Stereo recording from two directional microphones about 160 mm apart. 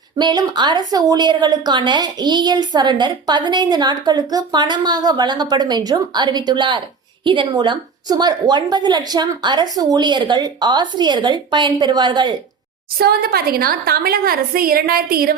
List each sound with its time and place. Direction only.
0.2 s a woman's voice: 30° right (ahead or behind)
13.0 s a woman's voice: 75° right (ahead or behind)